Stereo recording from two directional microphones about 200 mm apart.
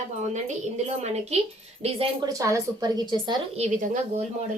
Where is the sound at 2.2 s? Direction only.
15° right (ahead or behind).